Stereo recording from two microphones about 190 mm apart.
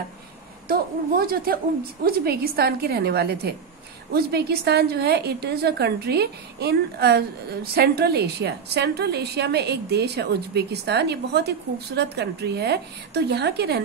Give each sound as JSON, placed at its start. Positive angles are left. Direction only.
{"t": 0.7, "sound": "a woman's voice", "side_deg": -50}